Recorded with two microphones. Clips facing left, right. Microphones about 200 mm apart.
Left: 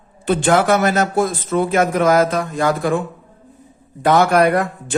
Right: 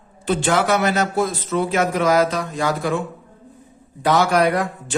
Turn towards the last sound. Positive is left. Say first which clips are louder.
# left 3 dB
turn(degrees=55)  # may be behind; listen again after turning